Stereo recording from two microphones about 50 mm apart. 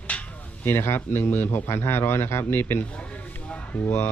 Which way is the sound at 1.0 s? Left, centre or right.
Left.